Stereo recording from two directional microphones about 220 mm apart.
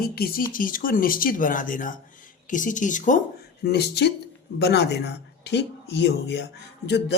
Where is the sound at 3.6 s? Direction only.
50° left (ahead or behind).